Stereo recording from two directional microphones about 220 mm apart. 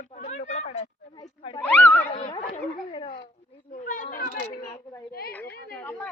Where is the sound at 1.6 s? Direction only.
5° left (ahead or behind).